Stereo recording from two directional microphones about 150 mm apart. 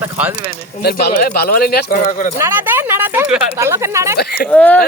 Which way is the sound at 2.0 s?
60° left (ahead or behind).